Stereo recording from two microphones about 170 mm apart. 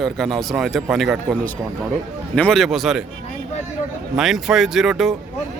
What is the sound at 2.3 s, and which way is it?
Speech, 5° left (ahead or behind).